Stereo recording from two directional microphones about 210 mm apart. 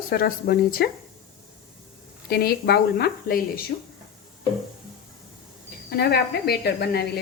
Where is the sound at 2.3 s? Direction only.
45° left (ahead or behind).